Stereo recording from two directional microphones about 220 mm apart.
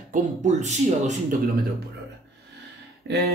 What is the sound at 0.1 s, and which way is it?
Speech, 35° right (ahead or behind).